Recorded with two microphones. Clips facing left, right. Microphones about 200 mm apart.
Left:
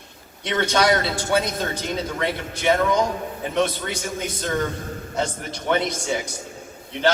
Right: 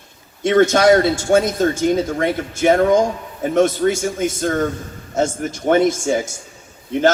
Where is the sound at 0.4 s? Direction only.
45° right (ahead or behind).